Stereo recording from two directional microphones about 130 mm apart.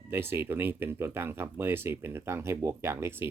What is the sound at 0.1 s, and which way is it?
Speech, 20° right (ahead or behind).